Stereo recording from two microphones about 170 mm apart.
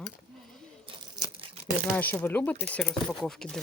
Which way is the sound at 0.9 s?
30° right (ahead or behind).